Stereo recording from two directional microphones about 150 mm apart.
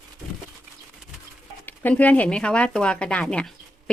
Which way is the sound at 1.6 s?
10° left (ahead or behind).